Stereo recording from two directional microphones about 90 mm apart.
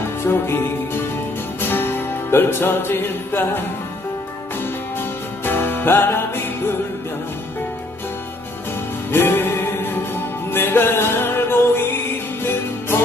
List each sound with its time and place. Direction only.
0.3 s music: 25° left (ahead or behind)
5.5 s music: 25° left (ahead or behind)
9.1 s music: 25° left (ahead or behind)